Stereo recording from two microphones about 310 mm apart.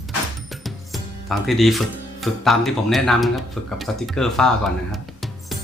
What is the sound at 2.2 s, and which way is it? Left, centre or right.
Speech, centre.